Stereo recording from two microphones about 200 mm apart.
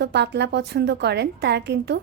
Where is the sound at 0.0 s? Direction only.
55° right (ahead or behind).